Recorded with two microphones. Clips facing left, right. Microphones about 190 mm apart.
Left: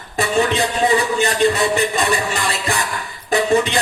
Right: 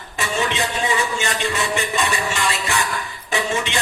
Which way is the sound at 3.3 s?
35° left (ahead or behind).